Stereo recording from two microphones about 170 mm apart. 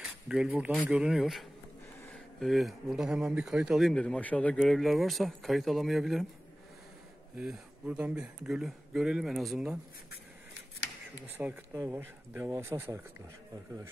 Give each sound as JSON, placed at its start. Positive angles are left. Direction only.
{"t": 0.3, "sound": "speech", "side_deg": -5}
{"t": 7.3, "sound": "speech", "side_deg": -5}
{"t": 11.2, "sound": "speech", "side_deg": -10}